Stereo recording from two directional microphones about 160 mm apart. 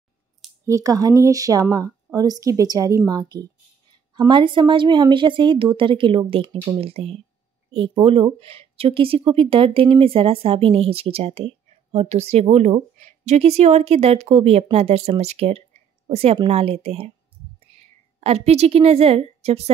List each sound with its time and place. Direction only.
0.7 s speech: 20° right (ahead or behind); by 17.1 s 40° right (ahead or behind)
18.2 s speech: 40° right (ahead or behind)